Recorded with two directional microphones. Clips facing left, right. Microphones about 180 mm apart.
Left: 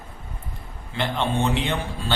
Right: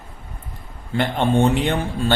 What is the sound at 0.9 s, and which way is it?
Speech, 45° right (ahead or behind).